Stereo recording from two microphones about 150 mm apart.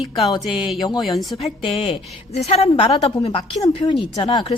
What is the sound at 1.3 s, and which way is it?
Speech, 40° left (ahead or behind).